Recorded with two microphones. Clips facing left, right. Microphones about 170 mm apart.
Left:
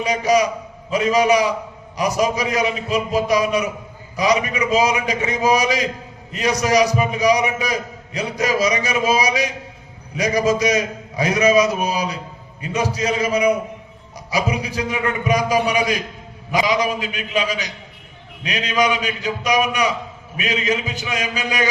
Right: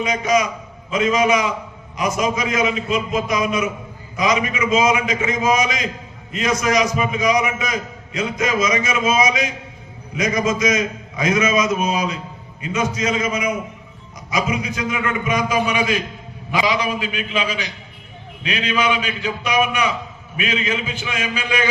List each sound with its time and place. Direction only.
0.0 s a man's voice: 35° left (ahead or behind)